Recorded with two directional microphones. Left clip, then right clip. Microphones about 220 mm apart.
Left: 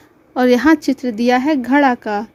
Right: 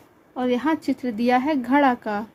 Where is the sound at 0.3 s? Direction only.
40° left (ahead or behind).